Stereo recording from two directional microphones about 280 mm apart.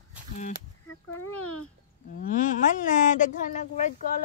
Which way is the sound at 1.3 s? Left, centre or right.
Left.